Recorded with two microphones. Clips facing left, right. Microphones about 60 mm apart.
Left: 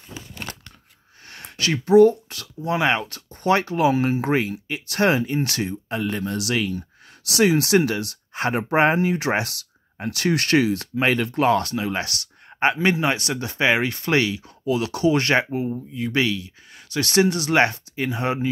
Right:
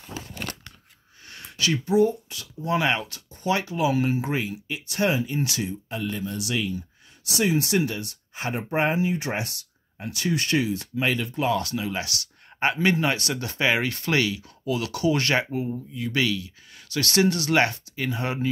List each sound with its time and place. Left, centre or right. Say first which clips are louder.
1.3 s speech: left 1 dB; left
2.6 s speech: left 3 dB; left
3.4 s speech: left 5 dB; left
3.9 s speech: left 3 dB; left
4.2 s speech: left 6 dB; left
7.2 s speech: left 5 dB; left
9.9 s speech: left 4 dB; left
11.6 s speech: left 3 dB; left
12.5 s speech: left 3 dB; left
16.0 s speech: left 3 dB; left